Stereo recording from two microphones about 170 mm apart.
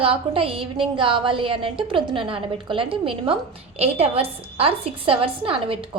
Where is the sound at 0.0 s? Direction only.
30° right (ahead or behind).